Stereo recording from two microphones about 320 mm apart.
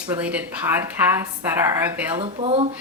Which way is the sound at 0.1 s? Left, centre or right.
Centre.